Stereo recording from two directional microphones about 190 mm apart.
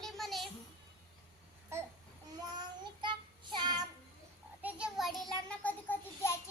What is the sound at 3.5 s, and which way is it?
Child singing, 20° right (ahead or behind).